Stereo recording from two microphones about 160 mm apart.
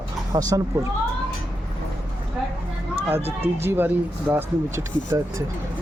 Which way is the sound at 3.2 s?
40° right (ahead or behind).